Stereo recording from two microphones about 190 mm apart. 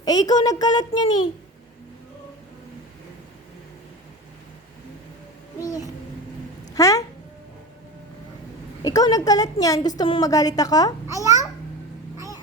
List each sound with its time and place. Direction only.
0.0 s a woman's voice: 20° left (ahead or behind)
5.5 s a sound: 20° left (ahead or behind)
6.7 s cat: 20° left (ahead or behind)
8.8 s a woman's voice: 20° left (ahead or behind)
11.0 s babbling: 15° right (ahead or behind)